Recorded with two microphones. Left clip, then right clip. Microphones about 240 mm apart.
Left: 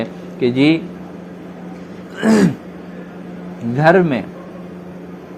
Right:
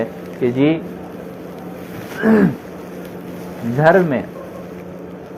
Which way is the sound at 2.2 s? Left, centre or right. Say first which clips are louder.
Even; left.